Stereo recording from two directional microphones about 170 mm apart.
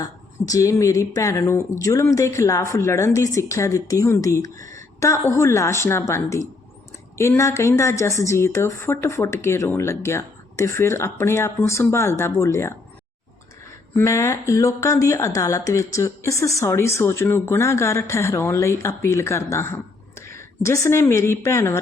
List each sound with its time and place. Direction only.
0.0 s speech: 20° left (ahead or behind)
13.9 s speech: 15° left (ahead or behind)